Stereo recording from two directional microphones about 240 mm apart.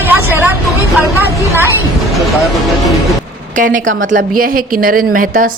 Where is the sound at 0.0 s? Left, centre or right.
Centre.